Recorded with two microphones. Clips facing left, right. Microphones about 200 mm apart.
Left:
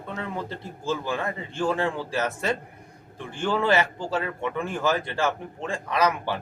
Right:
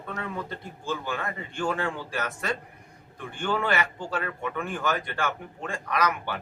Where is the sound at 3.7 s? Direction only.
25° left (ahead or behind).